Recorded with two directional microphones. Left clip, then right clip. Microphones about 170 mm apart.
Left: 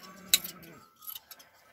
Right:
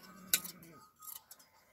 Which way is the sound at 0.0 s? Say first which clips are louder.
Left 9 dB; 25° left (ahead or behind).